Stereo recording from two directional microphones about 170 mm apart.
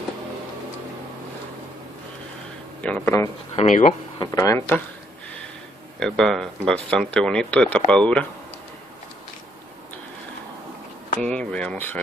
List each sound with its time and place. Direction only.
2.8 s speech: 10° left (ahead or behind)
3.5 s speech: 40° left (ahead or behind)
4.2 s speech: 20° left (ahead or behind)
5.9 s speech: 5° left (ahead or behind)
11.2 s speech: 5° left (ahead or behind)